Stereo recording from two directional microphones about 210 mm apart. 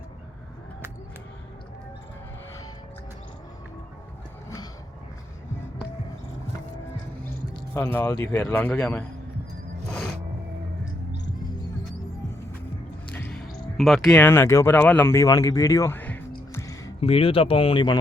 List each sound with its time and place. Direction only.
7.7 s speech: 10° left (ahead or behind)
13.1 s speech: 5° left (ahead or behind)
16.5 s music: 15° left (ahead or behind)
17.0 s speech: 25° left (ahead or behind)